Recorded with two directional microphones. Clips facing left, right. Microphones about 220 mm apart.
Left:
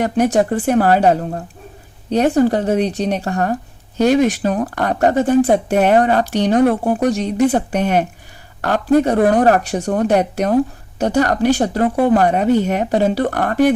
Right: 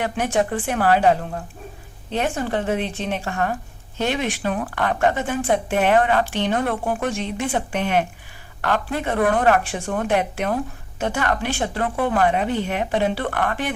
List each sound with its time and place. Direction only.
0.0 s speech: 40° left (ahead or behind)